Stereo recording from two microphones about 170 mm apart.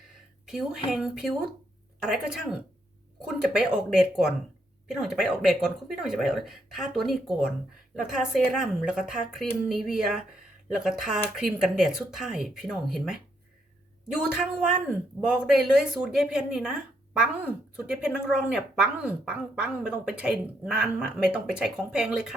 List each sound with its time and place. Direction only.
0.4 s a woman's voice: centre (ahead or behind)